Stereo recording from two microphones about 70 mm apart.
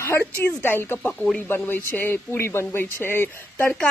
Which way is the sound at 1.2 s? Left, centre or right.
Centre.